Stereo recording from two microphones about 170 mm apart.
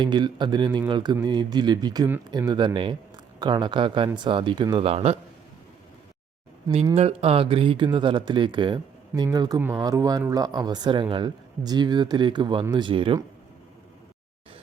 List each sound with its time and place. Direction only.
0.0 s speech: 25° right (ahead or behind)
6.9 s speech: 35° right (ahead or behind)